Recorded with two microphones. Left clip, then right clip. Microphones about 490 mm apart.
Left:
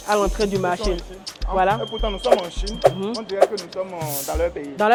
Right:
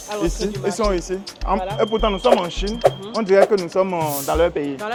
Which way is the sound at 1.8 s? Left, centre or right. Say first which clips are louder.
Right 7 dB; right.